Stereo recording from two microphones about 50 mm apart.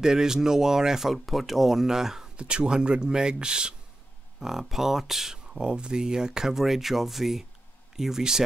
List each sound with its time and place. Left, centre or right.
0.0 s speech: centre
2.3 s speech: right
4.4 s speech: centre